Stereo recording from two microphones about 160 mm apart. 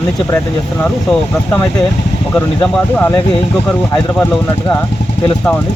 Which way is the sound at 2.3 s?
10° left (ahead or behind).